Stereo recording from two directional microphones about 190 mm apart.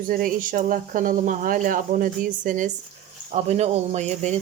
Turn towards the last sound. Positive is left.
turn(degrees=-40)  # may be behind; listen again after turning